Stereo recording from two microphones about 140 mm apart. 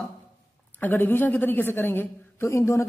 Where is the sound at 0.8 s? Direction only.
15° left (ahead or behind).